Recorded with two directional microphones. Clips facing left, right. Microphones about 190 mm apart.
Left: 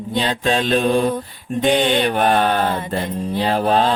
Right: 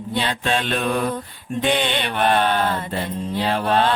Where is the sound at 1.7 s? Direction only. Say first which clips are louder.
Left 6 dB; 40° left (ahead or behind).